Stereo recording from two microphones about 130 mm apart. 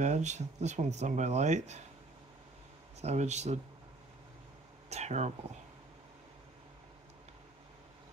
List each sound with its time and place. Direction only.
0.0 s speech: 65° right (ahead or behind)
3.0 s speech: 60° right (ahead or behind)
4.8 s a sound: 60° right (ahead or behind)